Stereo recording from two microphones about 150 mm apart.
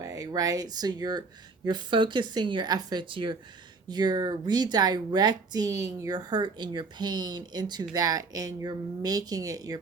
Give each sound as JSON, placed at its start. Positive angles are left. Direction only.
{"t": 0.0, "sound": "a woman's voice", "side_deg": -25}